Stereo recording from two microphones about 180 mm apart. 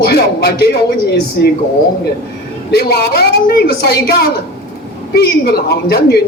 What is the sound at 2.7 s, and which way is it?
A woman's voice, 60° left (ahead or behind).